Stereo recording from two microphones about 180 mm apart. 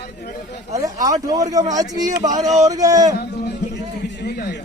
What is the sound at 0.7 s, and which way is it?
Speech, 20° right (ahead or behind).